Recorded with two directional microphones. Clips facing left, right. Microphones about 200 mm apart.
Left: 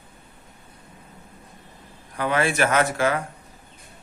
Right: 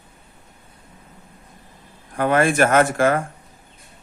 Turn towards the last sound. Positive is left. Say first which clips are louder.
# right 5 dB
turn(degrees=-50)  # may be behind; listen again after turning